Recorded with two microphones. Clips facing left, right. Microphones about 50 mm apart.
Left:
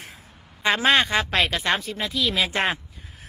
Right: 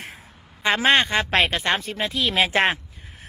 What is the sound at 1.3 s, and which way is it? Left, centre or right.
Speech, right.